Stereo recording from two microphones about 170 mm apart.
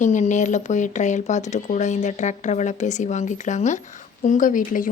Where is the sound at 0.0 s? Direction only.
45° left (ahead or behind).